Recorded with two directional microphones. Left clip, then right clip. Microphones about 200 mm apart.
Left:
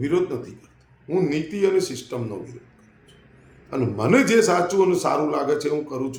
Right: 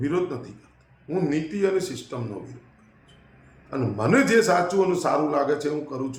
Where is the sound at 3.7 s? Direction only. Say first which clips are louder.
Left 3 dB; 15° left (ahead or behind).